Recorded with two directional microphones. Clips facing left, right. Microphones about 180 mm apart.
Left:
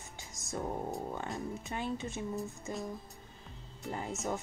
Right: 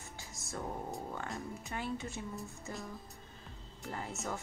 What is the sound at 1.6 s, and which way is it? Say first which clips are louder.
Speech: left 2 dB; 20° left (ahead or behind).